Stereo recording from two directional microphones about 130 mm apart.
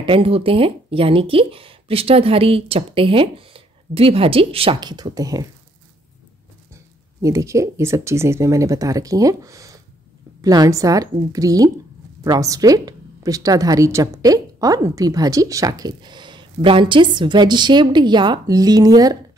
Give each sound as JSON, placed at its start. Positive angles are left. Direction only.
{"t": 0.0, "sound": "speech", "side_deg": -45}
{"t": 4.7, "sound": "speech", "side_deg": -30}
{"t": 6.7, "sound": "speech", "side_deg": -25}